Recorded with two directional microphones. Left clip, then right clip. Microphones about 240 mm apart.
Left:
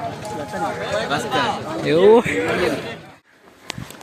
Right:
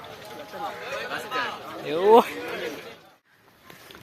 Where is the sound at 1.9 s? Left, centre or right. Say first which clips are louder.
Left 4 dB; centre.